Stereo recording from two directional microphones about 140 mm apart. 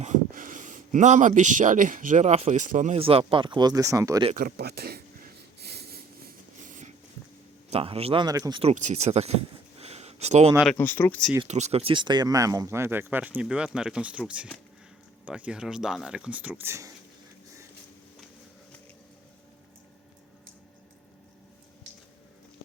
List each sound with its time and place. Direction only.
0.0 s speech: 70° right (ahead or behind)
2.9 s speech: 45° right (ahead or behind); by 4.2 s 25° right (ahead or behind)
4.4 s speech: 90° right
5.9 s train: 80° right
7.7 s speech: 45° right (ahead or behind)
8.2 s speech: 30° right (ahead or behind)
8.6 s speech: 60° right (ahead or behind)
10.8 s speech: 15° left (ahead or behind)
11.4 s speech: 55° right (ahead or behind); by 16.9 s 20° right (ahead or behind)